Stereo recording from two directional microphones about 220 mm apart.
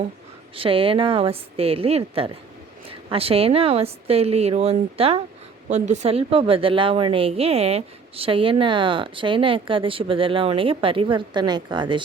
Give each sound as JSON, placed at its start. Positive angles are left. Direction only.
{"t": 0.5, "sound": "a woman's voice", "side_deg": -25}